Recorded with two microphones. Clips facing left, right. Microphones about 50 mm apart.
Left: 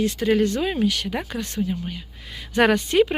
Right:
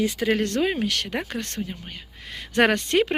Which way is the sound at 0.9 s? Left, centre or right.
Right.